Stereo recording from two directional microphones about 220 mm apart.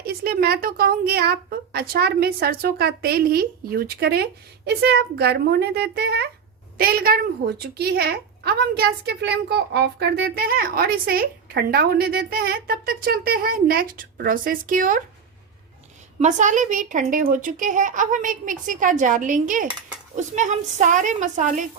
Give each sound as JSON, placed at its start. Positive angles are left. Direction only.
{"t": 0.0, "sound": "a woman's voice", "side_deg": -45}
{"t": 16.2, "sound": "a woman's voice", "side_deg": -35}